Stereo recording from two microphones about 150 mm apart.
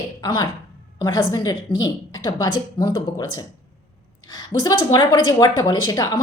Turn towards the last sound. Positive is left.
turn(degrees=25)  # may be behind; listen again after turning